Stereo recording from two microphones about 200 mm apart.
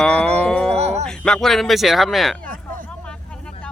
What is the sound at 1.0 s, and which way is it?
A man's voice, 5° left (ahead or behind).